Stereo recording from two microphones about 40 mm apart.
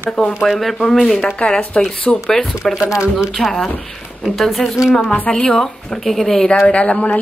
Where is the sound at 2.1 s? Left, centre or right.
Centre.